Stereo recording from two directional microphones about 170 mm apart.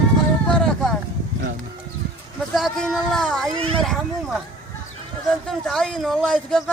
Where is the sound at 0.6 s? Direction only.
Centre (ahead or behind).